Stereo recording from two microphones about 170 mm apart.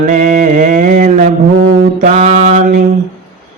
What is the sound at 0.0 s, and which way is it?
Mantra, 50° right (ahead or behind).